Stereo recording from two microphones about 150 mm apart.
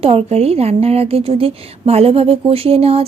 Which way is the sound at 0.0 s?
40° right (ahead or behind).